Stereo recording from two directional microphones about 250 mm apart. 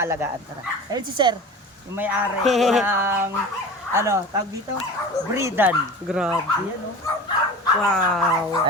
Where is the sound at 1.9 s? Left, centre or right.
Centre.